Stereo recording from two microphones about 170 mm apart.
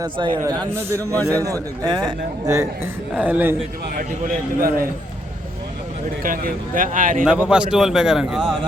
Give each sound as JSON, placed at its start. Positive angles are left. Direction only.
{"t": 0.0, "sound": "a man's voice", "side_deg": -25}
{"t": 3.9, "sound": "a man's voice", "side_deg": -55}
{"t": 6.2, "sound": "speech", "side_deg": -55}
{"t": 7.3, "sound": "a man's voice", "side_deg": -5}